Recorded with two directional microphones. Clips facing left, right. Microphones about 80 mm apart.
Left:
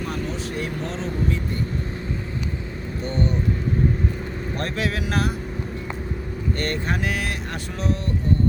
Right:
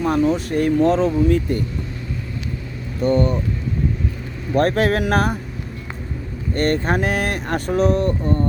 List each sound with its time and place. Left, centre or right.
0.0 s speech: right
3.0 s speech: right
4.5 s speech: right
6.5 s speech: right